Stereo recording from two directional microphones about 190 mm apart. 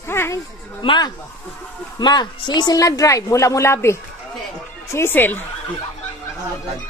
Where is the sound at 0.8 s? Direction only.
25° left (ahead or behind).